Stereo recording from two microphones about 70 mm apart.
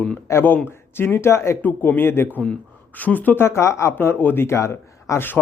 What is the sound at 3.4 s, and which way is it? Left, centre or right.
Speech, left.